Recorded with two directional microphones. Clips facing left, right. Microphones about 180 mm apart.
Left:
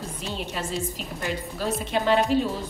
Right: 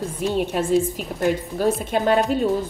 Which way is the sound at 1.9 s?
50° right (ahead or behind).